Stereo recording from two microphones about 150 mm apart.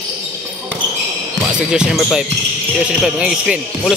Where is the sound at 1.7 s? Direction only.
5° right (ahead or behind).